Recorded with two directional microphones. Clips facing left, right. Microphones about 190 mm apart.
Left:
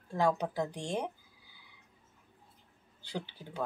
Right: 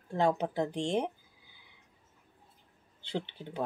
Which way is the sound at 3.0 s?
20° right (ahead or behind).